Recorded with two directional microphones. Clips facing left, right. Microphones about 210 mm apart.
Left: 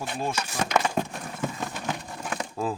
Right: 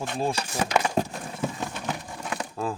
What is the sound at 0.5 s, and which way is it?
Speech, 10° right (ahead or behind).